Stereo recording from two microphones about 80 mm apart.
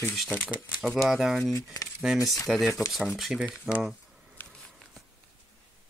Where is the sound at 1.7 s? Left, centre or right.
Left.